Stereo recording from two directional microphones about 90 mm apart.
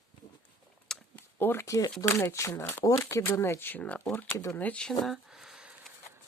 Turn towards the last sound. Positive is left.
turn(degrees=-5)  # may be behind; listen again after turning